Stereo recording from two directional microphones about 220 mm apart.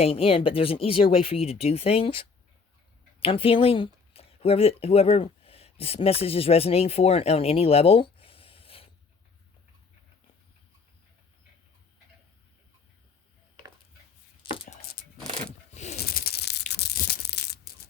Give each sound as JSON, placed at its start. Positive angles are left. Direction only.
{"t": 0.0, "sound": "speech", "side_deg": 25}
{"t": 14.5, "sound": "a sound", "side_deg": 25}
{"t": 15.7, "sound": "snake", "side_deg": 30}
{"t": 16.0, "sound": "sanding", "side_deg": 45}
{"t": 16.7, "sound": "crushing", "side_deg": 45}